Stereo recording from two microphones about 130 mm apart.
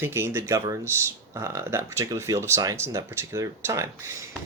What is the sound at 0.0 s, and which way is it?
Speech, 20° right (ahead or behind).